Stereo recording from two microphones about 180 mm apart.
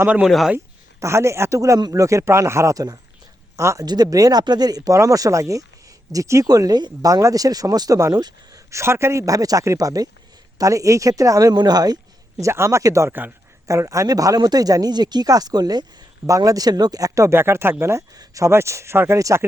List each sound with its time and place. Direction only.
0.0 s speech: 5° right (ahead or behind)
0.5 s a man's voice: 15° right (ahead or behind)